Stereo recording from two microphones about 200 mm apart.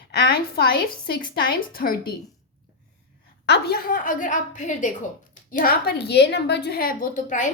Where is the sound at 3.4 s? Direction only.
55° left (ahead or behind); by 7.4 s 40° left (ahead or behind).